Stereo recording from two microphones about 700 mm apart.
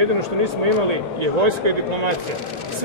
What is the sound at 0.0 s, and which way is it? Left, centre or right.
A man's voice, right.